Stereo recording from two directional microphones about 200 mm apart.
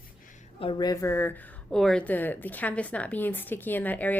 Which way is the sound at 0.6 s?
25° left (ahead or behind).